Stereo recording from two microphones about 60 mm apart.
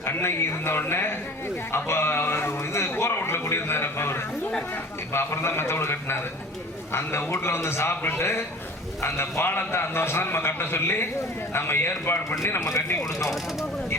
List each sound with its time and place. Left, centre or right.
0.0 s a man's voice: left
12.5 s speech: left